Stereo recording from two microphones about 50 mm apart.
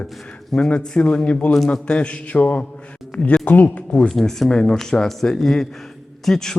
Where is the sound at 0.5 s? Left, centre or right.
Centre.